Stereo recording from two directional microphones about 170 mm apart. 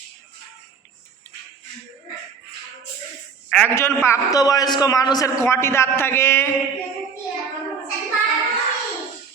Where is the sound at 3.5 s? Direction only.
10° left (ahead or behind).